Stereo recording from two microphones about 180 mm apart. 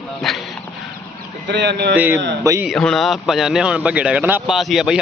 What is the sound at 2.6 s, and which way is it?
A man's voice, 5° left (ahead or behind).